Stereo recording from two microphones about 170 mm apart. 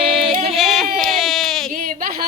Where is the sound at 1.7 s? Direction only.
55° right (ahead or behind).